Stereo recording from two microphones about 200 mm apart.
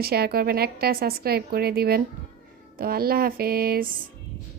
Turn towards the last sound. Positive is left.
turn(degrees=-45)  # may be behind; listen again after turning